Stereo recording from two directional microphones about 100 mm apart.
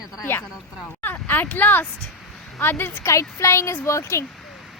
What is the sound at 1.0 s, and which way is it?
A child's voice, 20° left (ahead or behind).